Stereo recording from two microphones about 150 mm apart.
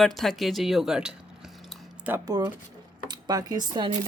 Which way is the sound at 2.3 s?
25° right (ahead or behind).